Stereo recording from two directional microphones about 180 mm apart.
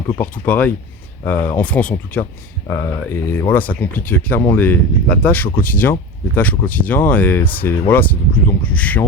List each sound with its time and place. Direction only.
0.1 s speech: 10° left (ahead or behind)